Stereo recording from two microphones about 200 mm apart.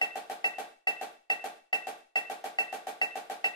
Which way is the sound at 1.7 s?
20° left (ahead or behind).